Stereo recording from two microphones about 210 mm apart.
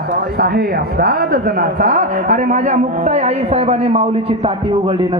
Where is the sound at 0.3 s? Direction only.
45° right (ahead or behind).